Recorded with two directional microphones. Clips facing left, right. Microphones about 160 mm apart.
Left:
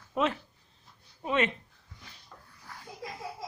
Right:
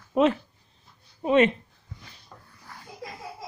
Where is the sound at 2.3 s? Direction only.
20° right (ahead or behind).